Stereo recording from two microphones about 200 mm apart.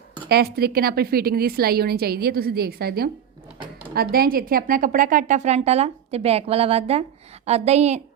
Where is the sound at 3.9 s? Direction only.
50° right (ahead or behind); by 8.0 s 35° right (ahead or behind).